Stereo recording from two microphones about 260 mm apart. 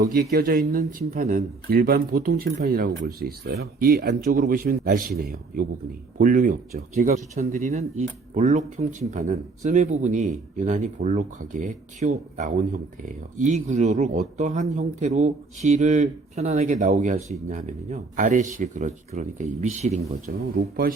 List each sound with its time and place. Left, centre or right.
0.0 s speech: right